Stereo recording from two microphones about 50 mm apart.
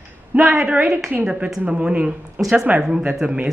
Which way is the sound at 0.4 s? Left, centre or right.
Centre.